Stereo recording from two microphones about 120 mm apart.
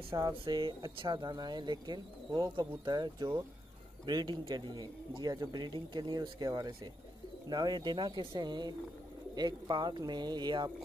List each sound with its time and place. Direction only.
0.1 s speech: 40° right (ahead or behind)